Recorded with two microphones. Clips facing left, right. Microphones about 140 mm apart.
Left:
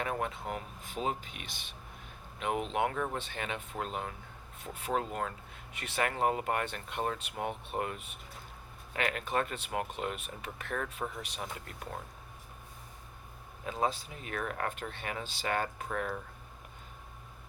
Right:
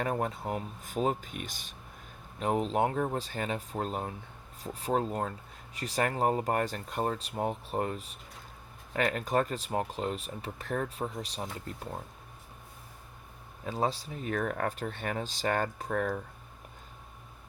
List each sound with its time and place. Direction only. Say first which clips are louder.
0.0 s speech: right 3 dB; 40° right (ahead or behind)
13.7 s speech: right 2 dB; 35° right (ahead or behind)